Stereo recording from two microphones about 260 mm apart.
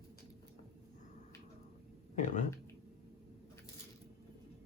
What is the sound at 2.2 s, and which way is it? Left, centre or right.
Speech, left.